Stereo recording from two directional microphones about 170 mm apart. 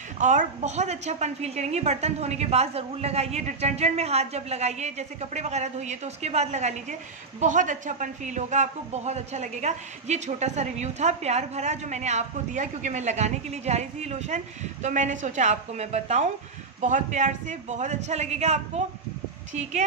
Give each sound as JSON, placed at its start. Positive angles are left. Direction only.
{"t": 0.2, "sound": "a woman's voice", "side_deg": -45}